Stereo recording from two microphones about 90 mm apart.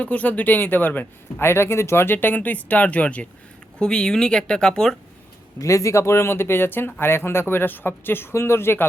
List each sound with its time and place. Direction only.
0.0 s speech: 15° left (ahead or behind)
5.5 s speech: 35° left (ahead or behind)